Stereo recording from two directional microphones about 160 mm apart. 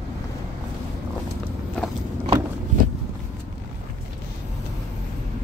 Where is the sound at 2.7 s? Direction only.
55° right (ahead or behind).